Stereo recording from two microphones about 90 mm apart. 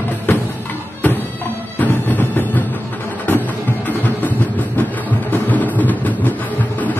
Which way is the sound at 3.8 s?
20° left (ahead or behind).